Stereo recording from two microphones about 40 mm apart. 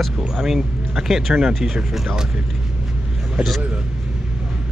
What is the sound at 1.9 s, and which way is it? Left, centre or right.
Speech, centre.